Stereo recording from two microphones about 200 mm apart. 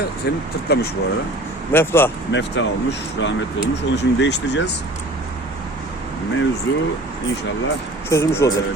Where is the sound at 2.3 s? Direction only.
65° left (ahead or behind).